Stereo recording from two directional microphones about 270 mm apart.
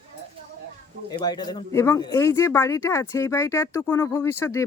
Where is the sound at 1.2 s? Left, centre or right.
Centre.